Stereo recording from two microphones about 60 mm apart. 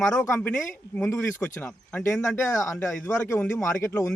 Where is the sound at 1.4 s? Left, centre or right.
Left.